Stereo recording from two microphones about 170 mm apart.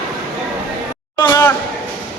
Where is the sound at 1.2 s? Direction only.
20° left (ahead or behind).